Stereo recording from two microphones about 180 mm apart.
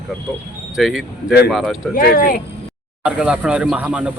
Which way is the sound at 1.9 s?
55° left (ahead or behind).